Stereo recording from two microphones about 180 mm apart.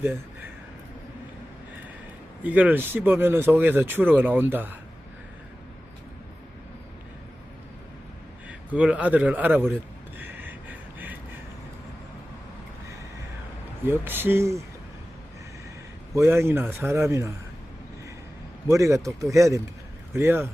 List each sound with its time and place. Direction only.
2.4 s speech: 10° right (ahead or behind)
8.4 s speech: 5° right (ahead or behind)
10.2 s a sound: 10° right (ahead or behind)
13.8 s speech: 10° right (ahead or behind)
16.1 s speech: 15° right (ahead or behind)
18.7 s speech: 15° right (ahead or behind)